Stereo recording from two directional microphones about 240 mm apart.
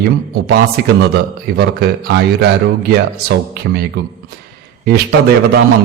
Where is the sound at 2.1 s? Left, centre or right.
Right.